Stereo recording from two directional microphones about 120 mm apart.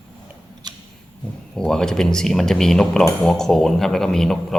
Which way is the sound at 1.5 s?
5° left (ahead or behind).